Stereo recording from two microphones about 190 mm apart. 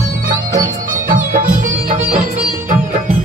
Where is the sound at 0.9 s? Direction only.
45° right (ahead or behind).